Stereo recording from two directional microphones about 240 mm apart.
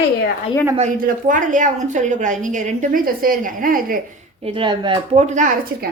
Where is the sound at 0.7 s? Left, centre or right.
Right.